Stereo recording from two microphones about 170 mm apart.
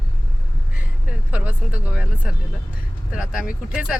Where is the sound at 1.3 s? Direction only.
10° right (ahead or behind).